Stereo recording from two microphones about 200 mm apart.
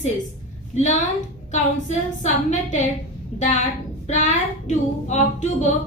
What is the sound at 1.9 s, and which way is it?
A woman's voice, 35° left (ahead or behind).